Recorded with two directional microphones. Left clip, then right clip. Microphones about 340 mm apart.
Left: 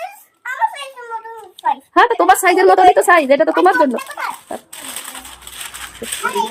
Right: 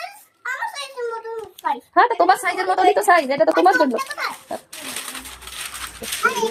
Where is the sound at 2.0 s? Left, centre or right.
Left.